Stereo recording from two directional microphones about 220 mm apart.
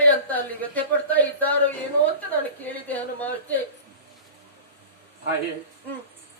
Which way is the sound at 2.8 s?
5° left (ahead or behind).